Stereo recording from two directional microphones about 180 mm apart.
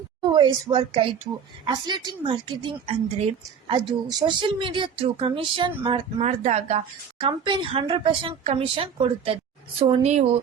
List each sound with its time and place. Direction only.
0.2 s a woman's voice: 25° right (ahead or behind)